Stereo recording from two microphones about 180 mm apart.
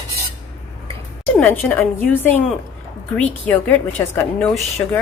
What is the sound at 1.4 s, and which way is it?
A woman's voice, 10° left (ahead or behind).